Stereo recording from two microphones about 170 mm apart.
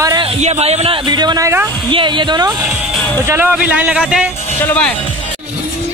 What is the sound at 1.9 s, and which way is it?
Speech, 30° right (ahead or behind).